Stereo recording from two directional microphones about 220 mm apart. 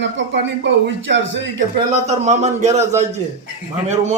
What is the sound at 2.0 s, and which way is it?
A man's voice, 30° right (ahead or behind).